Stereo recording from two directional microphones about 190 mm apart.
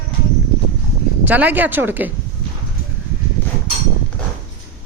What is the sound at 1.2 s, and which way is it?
Speech, 10° right (ahead or behind).